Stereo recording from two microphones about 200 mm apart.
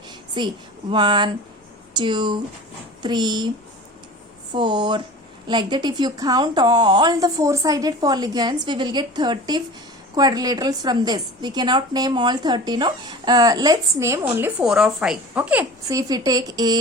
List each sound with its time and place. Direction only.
0.3 s a woman's voice: 25° right (ahead or behind)
4.5 s a woman's voice: 20° right (ahead or behind)